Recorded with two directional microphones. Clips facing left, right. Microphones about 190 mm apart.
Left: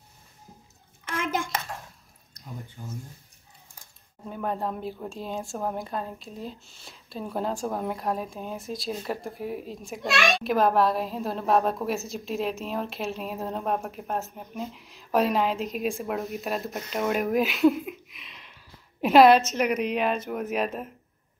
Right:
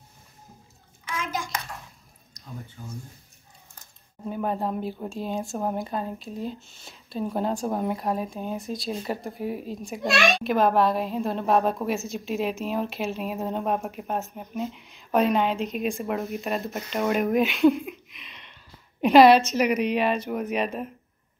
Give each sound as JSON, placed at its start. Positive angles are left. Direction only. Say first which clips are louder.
{"t": 1.1, "sound": "hands", "louder": "left 2 dB", "side_deg": 55}
{"t": 2.8, "sound": "speech", "louder": "left 1 dB", "side_deg": 10}
{"t": 4.3, "sound": "a woman's voice", "louder": "right 3 dB", "side_deg": -5}